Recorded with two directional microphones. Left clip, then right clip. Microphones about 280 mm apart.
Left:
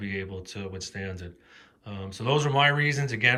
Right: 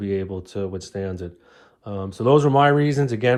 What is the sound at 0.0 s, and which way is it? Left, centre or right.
Speech, centre.